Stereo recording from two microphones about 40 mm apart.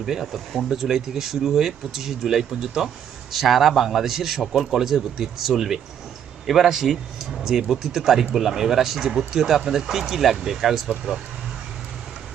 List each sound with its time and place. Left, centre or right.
0.0 s a man's voice: centre
3.3 s a man's voice: centre